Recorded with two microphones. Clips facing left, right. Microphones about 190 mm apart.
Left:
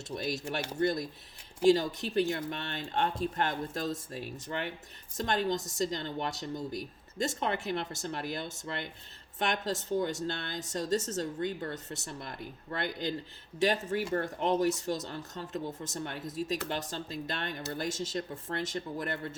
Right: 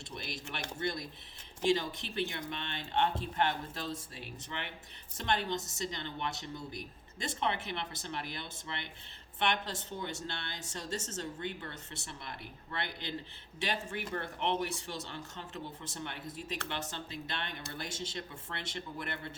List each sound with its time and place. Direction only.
0.1 s speech: 45° left (ahead or behind)